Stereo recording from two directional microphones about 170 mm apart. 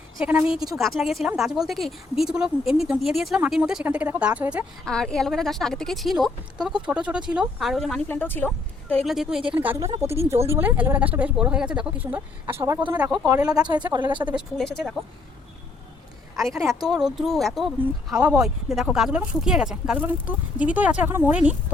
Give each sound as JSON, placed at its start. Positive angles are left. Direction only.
{"t": 0.2, "sound": "a woman's voice", "side_deg": -5}
{"t": 4.9, "sound": "a woman's voice", "side_deg": 5}
{"t": 14.3, "sound": "a woman's voice", "side_deg": 0}
{"t": 16.3, "sound": "a woman's voice", "side_deg": 0}